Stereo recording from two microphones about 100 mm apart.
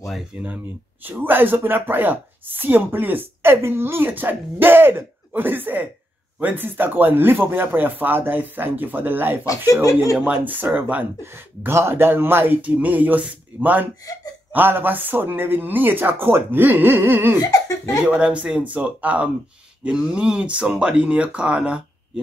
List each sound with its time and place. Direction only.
1.0 s a woman's voice: 20° right (ahead or behind)
17.4 s laughter: 40° left (ahead or behind)
18.0 s speech: 10° right (ahead or behind)